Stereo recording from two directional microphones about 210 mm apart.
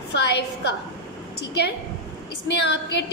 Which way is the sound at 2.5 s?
55° left (ahead or behind).